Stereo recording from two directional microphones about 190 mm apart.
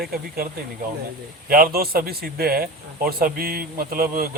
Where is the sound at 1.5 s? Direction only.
50° right (ahead or behind).